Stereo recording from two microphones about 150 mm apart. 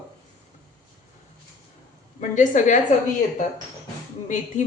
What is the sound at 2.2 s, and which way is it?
Speech, 55° left (ahead or behind).